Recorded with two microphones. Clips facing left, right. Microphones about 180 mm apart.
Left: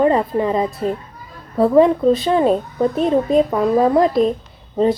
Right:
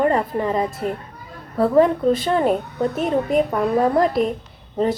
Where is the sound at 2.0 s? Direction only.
20° left (ahead or behind).